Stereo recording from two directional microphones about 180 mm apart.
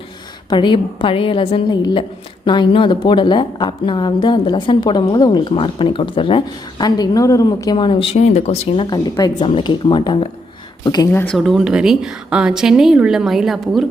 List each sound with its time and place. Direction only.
0.5 s a woman's voice: 25° left (ahead or behind)
8.9 s a woman's voice: 20° left (ahead or behind)
11.1 s speech: 10° left (ahead or behind)
11.3 s a woman's voice: centre (ahead or behind)